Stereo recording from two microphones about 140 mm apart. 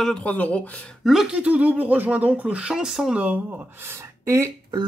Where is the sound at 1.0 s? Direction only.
Centre (ahead or behind).